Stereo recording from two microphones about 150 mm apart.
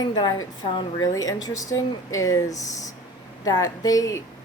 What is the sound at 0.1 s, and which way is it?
Speech, 25° left (ahead or behind).